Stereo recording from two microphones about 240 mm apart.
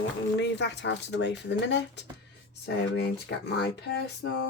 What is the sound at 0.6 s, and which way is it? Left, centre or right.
Speech, left.